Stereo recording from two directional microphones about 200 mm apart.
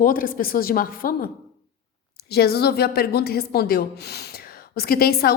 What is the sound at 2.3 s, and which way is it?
Speech, 50° left (ahead or behind).